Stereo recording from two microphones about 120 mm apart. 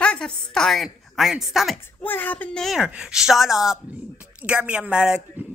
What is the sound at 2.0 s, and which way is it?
Speech, 15° left (ahead or behind).